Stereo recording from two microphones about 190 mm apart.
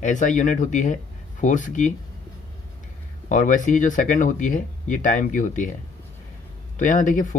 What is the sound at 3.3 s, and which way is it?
Speech, 40° left (ahead or behind).